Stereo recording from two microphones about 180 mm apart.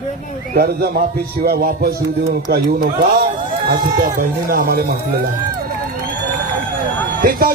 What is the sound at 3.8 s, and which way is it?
Speech, 25° right (ahead or behind).